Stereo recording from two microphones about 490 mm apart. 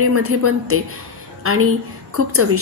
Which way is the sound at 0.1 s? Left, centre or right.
Right.